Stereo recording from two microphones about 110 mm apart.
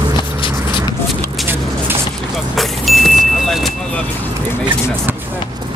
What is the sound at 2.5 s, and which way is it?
Vehicle, centre (ahead or behind).